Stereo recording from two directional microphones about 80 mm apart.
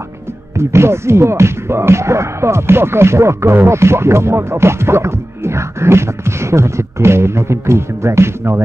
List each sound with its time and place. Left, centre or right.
0.6 s speech: right